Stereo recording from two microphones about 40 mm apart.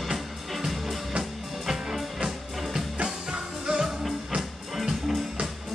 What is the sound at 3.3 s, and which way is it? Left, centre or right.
Music, centre.